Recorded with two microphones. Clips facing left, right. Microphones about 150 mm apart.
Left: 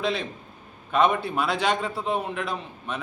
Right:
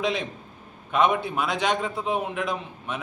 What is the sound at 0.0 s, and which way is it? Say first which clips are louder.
A man's voice: right 1 dB; 15° right (ahead or behind).